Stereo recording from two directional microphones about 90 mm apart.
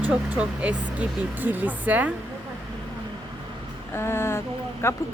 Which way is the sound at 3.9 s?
30° left (ahead or behind).